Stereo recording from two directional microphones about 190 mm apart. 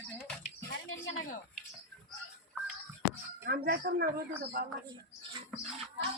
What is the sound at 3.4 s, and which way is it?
Speech, 55° right (ahead or behind).